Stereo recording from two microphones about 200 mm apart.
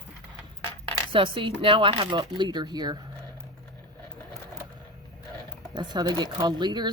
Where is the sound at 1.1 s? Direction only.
25° right (ahead or behind).